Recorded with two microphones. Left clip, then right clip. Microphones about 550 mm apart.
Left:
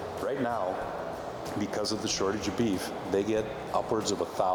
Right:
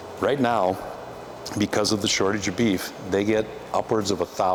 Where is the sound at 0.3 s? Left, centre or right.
Right.